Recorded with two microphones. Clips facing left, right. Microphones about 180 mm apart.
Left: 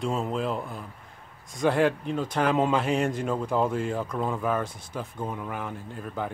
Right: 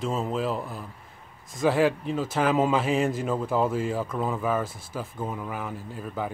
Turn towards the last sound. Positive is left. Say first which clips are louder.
# right 1 dB
turn(degrees=-5)  # may be behind; listen again after turning